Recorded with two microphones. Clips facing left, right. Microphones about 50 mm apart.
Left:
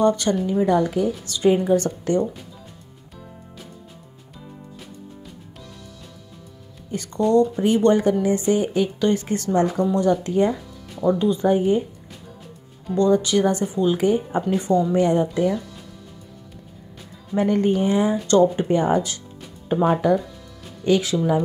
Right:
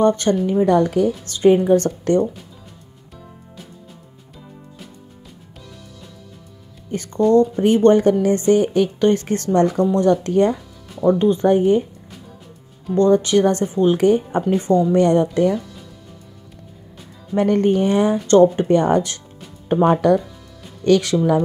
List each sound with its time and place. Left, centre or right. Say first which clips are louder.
0.0 s speech: right 3 dB; right
0.7 s speech: right 4 dB; right
1.2 s speech: right 5 dB; right
6.9 s speech: right 4 dB; right
11.0 s speech: right 4 dB; right
11.4 s speech: right 3 dB; right
12.9 s speech: right 4 dB; right
13.9 s a woman's voice: right 4 dB; right
17.4 s speech: right 3 dB; right
18.2 s speech: right 6 dB; right
18.7 s a woman's voice: right 4 dB; right